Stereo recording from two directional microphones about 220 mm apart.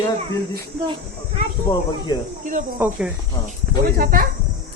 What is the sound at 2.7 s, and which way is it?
Speech, 10° right (ahead or behind).